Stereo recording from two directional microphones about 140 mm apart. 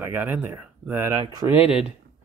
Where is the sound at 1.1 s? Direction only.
35° right (ahead or behind).